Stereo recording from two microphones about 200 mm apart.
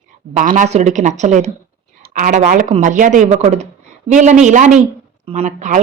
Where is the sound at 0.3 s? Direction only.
40° right (ahead or behind).